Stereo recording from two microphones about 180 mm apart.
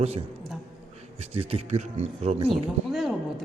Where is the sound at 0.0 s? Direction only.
35° right (ahead or behind).